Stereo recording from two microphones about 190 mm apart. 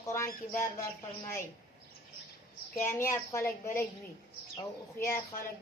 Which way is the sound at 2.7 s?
15° left (ahead or behind).